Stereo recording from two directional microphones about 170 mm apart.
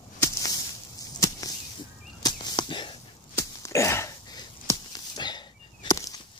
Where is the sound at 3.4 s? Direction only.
15° left (ahead or behind).